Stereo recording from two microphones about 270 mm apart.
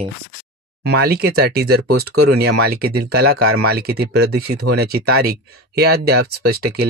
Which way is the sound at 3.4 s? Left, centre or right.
Right.